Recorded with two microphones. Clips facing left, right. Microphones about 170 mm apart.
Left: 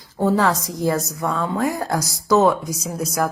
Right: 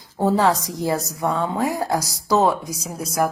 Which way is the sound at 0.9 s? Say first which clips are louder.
Even; 25° right (ahead or behind).